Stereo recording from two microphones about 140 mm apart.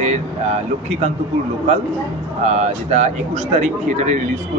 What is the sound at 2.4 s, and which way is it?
A man's voice, 55° right (ahead or behind).